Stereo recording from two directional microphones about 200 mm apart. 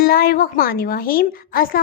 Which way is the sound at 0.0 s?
50° left (ahead or behind).